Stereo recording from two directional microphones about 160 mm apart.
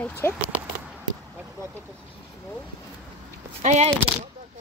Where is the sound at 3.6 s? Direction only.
45° right (ahead or behind).